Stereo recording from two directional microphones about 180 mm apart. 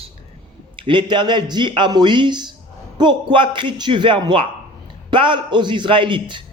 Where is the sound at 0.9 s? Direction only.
25° right (ahead or behind).